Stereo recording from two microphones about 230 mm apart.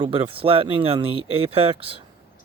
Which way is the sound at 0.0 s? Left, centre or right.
Right.